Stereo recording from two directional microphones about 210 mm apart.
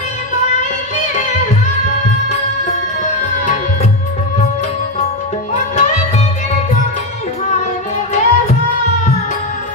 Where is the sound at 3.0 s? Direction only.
35° left (ahead or behind).